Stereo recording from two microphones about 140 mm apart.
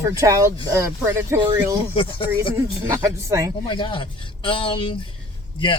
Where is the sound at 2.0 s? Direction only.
40° left (ahead or behind).